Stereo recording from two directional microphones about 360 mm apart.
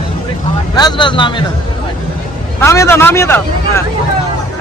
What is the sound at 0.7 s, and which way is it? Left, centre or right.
Speech, centre.